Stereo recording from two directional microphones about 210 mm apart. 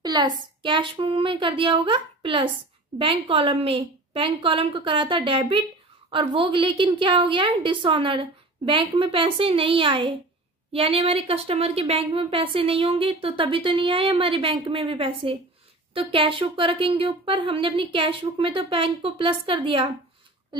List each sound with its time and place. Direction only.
0.0 s a woman's voice: 20° right (ahead or behind)